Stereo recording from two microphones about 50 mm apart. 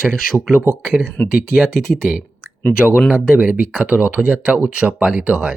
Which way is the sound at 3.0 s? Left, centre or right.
Right.